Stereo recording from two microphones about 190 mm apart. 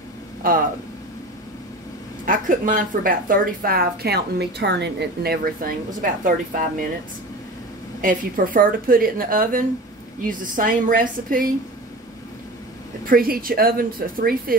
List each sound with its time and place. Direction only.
0.4 s speech: 45° right (ahead or behind)
2.2 s a woman's voice: 45° right (ahead or behind)
8.0 s a woman's voice: 45° right (ahead or behind)
13.0 s a woman's voice: 50° right (ahead or behind)